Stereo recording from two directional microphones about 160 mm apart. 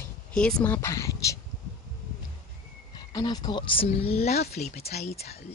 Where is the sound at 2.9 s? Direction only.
25° left (ahead or behind).